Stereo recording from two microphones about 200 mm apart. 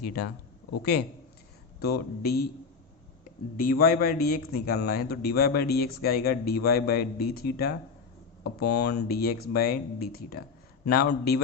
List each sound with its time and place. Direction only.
0.0 s a man's voice: 50° left (ahead or behind)
1.8 s a man's voice: 50° left (ahead or behind)
3.6 s a man's voice: 45° left (ahead or behind)